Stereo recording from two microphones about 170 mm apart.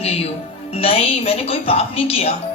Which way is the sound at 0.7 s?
35° left (ahead or behind).